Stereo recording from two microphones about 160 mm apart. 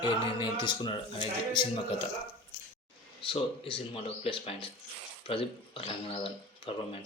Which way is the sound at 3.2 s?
30° left (ahead or behind).